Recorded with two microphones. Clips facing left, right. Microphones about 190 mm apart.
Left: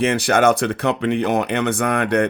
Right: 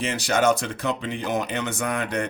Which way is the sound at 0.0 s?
60° left (ahead or behind).